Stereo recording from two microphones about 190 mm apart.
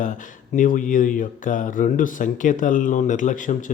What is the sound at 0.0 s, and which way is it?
Speech, 45° left (ahead or behind).